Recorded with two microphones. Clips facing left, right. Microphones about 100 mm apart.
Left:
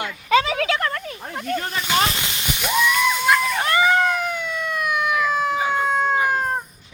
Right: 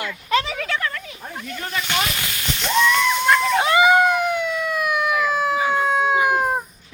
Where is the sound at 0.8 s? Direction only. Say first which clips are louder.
Left 2 dB; 45° left (ahead or behind).